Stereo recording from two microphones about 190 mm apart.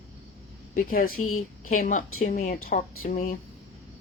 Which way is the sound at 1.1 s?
90° left.